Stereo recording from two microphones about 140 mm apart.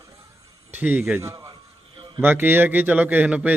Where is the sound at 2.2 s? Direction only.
15° right (ahead or behind).